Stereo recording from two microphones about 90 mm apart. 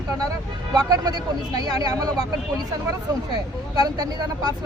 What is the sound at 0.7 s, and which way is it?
Speech, 45° right (ahead or behind).